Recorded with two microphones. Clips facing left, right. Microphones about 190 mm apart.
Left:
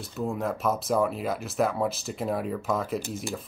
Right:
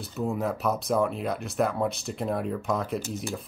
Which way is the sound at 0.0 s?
Centre (ahead or behind).